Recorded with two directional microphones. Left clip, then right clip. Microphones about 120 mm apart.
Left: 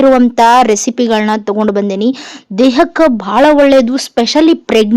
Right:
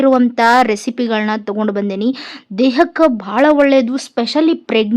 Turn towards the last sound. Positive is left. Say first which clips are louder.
# left 5 dB
turn(degrees=40)  # may be behind; listen again after turning